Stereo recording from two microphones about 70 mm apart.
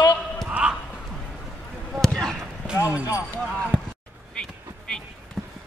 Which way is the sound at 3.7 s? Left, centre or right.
Centre.